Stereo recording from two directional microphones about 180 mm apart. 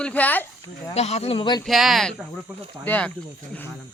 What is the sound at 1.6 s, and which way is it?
Speech, centre (ahead or behind).